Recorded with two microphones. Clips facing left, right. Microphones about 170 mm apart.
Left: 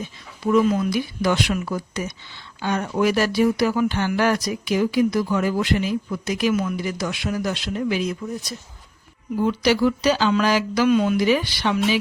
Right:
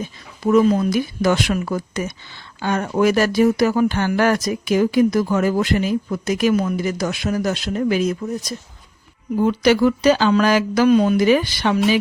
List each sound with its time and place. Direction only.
0.4 s speech: 40° right (ahead or behind)